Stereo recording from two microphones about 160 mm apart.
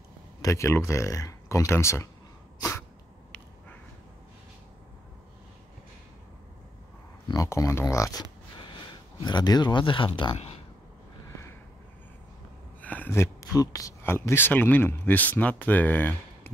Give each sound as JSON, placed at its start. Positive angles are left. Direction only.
{"t": 0.4, "sound": "speech", "side_deg": 20}
{"t": 7.2, "sound": "a sound", "side_deg": 20}
{"t": 9.2, "sound": "speech", "side_deg": 25}
{"t": 10.3, "sound": "speech", "side_deg": 40}
{"t": 12.8, "sound": "speech", "side_deg": 10}